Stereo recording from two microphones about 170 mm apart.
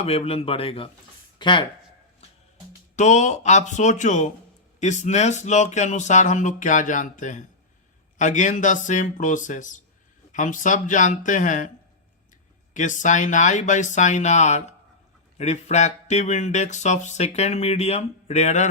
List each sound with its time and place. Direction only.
0.0 s speech: 35° left (ahead or behind)
2.9 s speech: 45° left (ahead or behind)
12.7 s speech: 45° left (ahead or behind)